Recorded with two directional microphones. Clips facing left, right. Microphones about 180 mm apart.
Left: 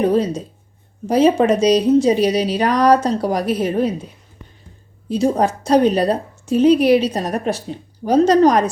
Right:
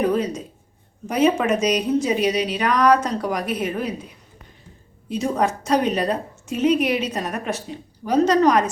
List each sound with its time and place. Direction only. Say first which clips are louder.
0.0 s a woman's voice: left 4 dB; 30° left (ahead or behind)
5.0 s a woman's voice: left 5 dB; 30° left (ahead or behind)